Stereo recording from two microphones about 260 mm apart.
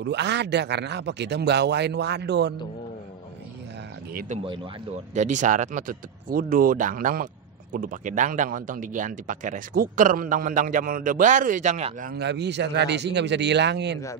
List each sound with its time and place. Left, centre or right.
0.0 s speech: right
4.1 s speech: right